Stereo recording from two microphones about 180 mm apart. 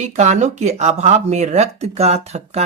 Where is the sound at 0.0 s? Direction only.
40° right (ahead or behind).